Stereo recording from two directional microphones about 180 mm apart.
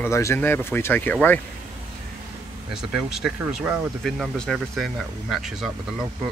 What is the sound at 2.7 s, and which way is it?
Speech, 5° right (ahead or behind).